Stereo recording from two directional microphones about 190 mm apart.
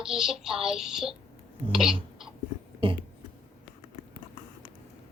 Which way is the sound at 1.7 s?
Centre (ahead or behind).